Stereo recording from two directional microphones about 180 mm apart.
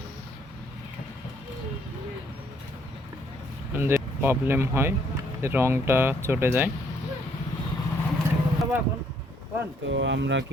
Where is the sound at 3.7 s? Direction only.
10° right (ahead or behind).